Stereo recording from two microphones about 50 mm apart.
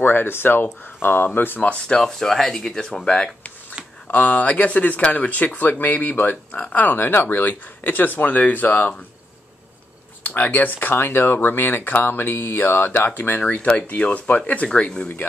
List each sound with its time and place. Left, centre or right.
0.0 s speech: left
2.0 s speech: centre
3.0 s speech: left
3.8 s a sound: centre
4.1 s speech: left
10.2 s speech: left
11.0 s speech: left
13.6 s speech: left
14.7 s speech: centre